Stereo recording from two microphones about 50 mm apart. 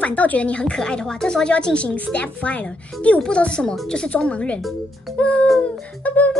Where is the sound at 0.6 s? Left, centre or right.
Centre.